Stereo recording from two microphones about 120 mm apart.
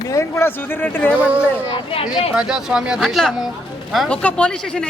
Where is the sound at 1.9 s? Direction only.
55° left (ahead or behind).